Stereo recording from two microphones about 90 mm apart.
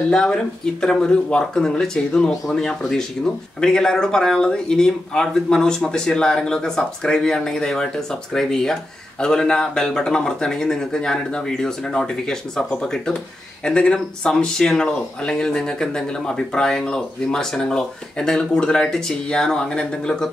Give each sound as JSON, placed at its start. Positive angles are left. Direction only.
{"t": 0.1, "sound": "speech", "side_deg": 10}